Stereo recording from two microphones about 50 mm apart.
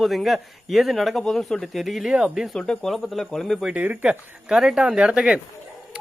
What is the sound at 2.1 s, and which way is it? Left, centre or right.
Speech, centre.